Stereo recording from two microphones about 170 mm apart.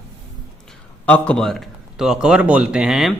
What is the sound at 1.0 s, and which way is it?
A man's voice, 10° left (ahead or behind).